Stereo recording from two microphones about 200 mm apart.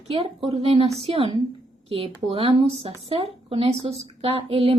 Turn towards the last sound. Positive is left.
turn(degrees=-30)  # may be behind; listen again after turning